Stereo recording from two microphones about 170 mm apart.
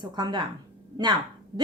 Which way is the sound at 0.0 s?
25° right (ahead or behind).